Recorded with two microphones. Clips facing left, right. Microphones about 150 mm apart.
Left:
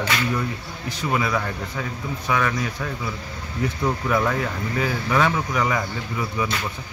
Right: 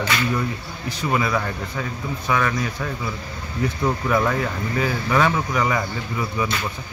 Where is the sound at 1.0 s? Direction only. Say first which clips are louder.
Right 1 dB; centre (ahead or behind).